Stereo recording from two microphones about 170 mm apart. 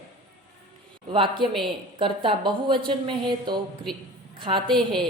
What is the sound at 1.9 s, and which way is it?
Speech, 30° right (ahead or behind).